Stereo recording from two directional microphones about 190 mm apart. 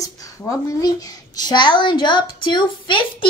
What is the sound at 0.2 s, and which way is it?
A woman's voice, 15° left (ahead or behind).